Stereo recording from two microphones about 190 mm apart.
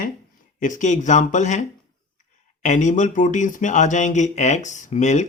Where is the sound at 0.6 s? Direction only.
40° left (ahead or behind).